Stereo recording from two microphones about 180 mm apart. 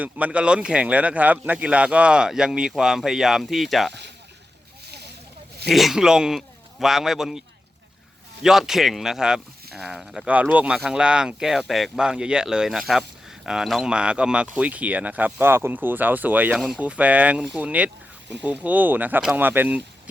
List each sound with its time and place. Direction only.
0.0 s speech: 5° right (ahead or behind)
4.9 s a sound: 65° right (ahead or behind)
5.6 s speech: centre (ahead or behind)